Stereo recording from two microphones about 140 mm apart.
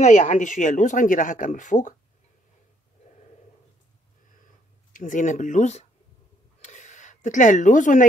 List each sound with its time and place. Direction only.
0.0 s speech: 60° left (ahead or behind)
4.9 s speech: 70° left (ahead or behind)
6.6 s a sound: 60° left (ahead or behind)